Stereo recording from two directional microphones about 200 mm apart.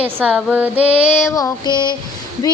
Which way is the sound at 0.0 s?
5° right (ahead or behind).